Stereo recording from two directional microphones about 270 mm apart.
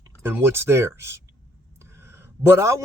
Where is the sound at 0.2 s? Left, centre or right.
Centre.